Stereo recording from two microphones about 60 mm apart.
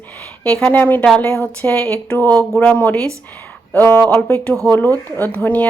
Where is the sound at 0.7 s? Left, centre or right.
Left.